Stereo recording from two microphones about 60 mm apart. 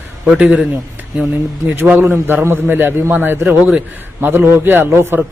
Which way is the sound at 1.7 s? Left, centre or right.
Right.